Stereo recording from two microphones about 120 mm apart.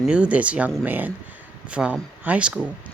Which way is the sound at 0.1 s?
10° right (ahead or behind).